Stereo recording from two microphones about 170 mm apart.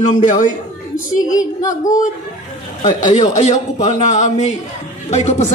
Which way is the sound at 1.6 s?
50° left (ahead or behind).